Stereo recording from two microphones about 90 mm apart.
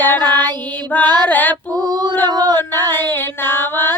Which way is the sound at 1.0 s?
50° right (ahead or behind).